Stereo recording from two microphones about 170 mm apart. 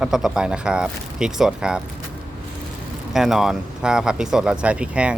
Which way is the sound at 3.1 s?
Centre (ahead or behind).